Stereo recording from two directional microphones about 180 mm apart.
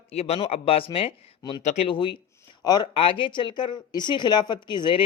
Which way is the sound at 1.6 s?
35° left (ahead or behind).